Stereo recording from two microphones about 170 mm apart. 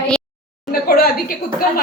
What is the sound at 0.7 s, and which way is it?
Speech, 60° left (ahead or behind).